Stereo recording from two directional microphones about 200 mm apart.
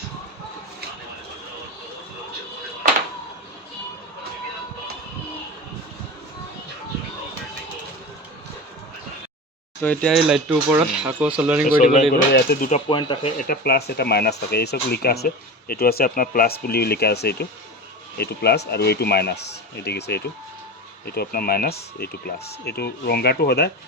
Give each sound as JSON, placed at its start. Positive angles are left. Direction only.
{"t": 9.8, "sound": "speech", "side_deg": 5}
{"t": 11.6, "sound": "speech", "side_deg": 40}
{"t": 12.1, "sound": "speech", "side_deg": 50}
{"t": 12.9, "sound": "speech", "side_deg": 25}
{"t": 13.5, "sound": "speech", "side_deg": 50}